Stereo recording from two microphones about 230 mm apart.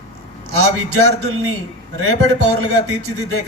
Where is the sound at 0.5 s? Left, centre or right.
Right.